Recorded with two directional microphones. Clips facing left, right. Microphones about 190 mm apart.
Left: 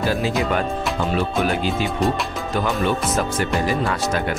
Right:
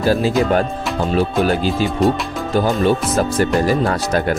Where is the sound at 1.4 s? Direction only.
35° right (ahead or behind).